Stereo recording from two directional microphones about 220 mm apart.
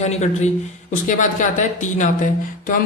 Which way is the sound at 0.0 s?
30° left (ahead or behind).